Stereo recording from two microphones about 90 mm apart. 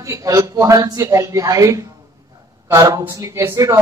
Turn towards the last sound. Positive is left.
turn(degrees=-30)  # may be behind; listen again after turning